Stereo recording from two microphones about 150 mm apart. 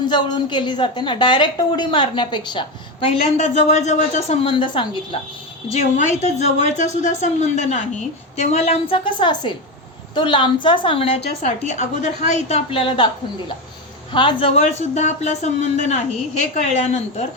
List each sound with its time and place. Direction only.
0.0 s a woman's voice: 30° left (ahead or behind)
3.1 s speech: 50° left (ahead or behind)
4.4 s a woman's voice: 35° left (ahead or behind)
5.7 s speech: 50° left (ahead or behind)
9.0 s a woman's voice: 30° left (ahead or behind); by 12.5 s 50° left (ahead or behind)
12.7 s a woman's voice: 35° left (ahead or behind)
14.1 s speech: 35° left (ahead or behind)